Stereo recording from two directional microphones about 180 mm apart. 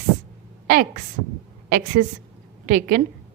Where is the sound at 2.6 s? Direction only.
50° right (ahead or behind).